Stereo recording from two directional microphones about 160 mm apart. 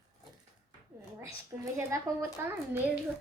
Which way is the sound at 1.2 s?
20° right (ahead or behind).